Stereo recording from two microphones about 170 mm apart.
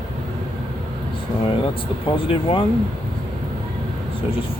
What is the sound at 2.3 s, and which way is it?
Speech, 30° left (ahead or behind).